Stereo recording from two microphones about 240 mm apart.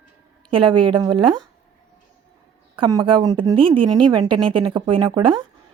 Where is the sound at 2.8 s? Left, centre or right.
Centre.